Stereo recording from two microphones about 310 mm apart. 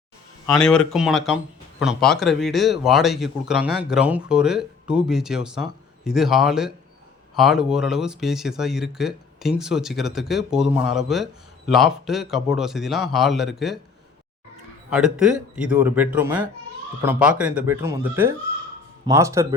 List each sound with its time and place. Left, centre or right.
0.5 s speech: centre
14.9 s speech: centre